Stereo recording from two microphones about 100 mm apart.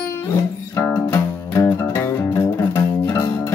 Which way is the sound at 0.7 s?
25° left (ahead or behind).